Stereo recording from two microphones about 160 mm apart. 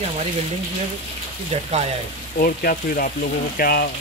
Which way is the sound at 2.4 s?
65° left (ahead or behind).